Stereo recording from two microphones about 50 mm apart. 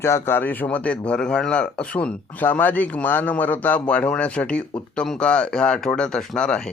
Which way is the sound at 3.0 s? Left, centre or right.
Left.